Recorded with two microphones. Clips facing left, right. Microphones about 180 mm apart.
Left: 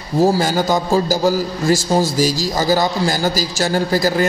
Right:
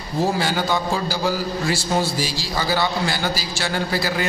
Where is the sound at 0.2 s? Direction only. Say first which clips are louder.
Left 6 dB; 40° left (ahead or behind).